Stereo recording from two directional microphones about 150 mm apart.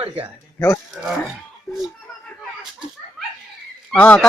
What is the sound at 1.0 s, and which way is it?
Speech, centre (ahead or behind).